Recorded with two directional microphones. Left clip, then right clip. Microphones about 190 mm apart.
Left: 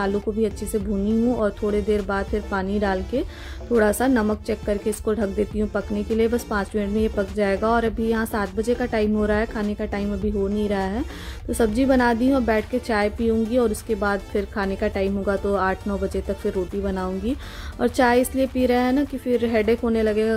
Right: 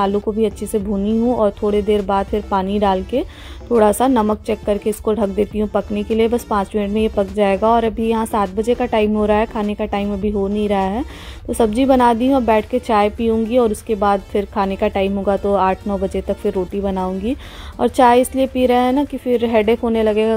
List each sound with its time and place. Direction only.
0.0 s a woman's voice: 15° right (ahead or behind)